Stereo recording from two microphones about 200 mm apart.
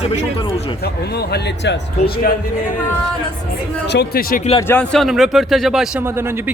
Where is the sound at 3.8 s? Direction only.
55° left (ahead or behind).